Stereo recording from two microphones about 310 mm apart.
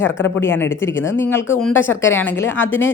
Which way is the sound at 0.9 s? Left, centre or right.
Left.